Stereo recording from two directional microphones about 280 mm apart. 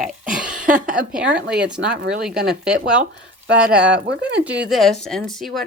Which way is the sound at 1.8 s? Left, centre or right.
Right.